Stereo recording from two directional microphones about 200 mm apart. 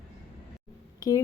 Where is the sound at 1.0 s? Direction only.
20° left (ahead or behind).